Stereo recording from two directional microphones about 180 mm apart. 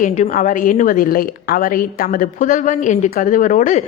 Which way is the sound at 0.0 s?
45° left (ahead or behind).